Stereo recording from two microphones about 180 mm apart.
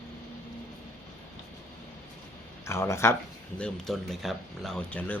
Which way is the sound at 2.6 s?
15° left (ahead or behind).